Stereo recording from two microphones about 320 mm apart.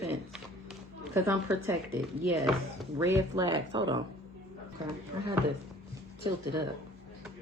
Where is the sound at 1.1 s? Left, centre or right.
Centre.